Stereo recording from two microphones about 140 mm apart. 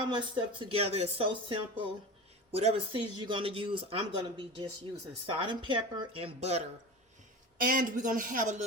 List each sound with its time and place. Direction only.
0.1 s speech: 40° right (ahead or behind)
7.6 s speech: 75° right (ahead or behind)